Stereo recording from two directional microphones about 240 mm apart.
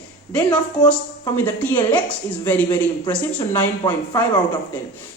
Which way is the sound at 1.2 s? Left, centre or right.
Centre.